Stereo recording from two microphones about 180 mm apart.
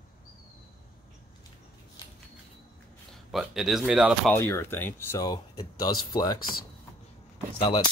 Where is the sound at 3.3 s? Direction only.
Centre (ahead or behind).